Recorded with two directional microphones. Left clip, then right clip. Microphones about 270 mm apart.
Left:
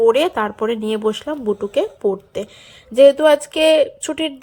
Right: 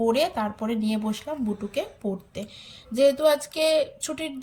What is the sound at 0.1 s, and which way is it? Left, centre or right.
A woman's voice, centre.